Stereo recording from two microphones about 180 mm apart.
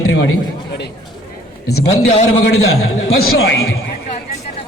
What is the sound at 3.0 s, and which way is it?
Speech, 60° left (ahead or behind).